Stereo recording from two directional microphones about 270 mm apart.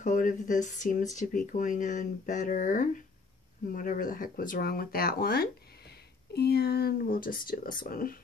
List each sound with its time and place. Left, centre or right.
0.0 s speech: left